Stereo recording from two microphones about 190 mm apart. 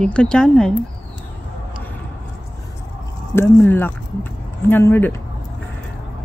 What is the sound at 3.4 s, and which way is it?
Speech, 10° left (ahead or behind).